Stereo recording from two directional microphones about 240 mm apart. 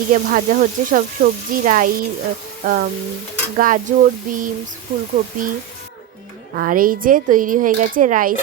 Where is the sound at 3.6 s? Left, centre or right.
Right.